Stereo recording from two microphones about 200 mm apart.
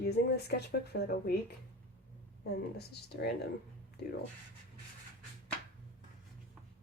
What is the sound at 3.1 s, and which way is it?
Speech, 50° left (ahead or behind).